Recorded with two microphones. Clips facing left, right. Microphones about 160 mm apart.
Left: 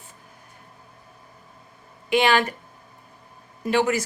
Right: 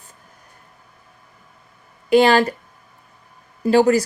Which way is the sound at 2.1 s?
35° right (ahead or behind).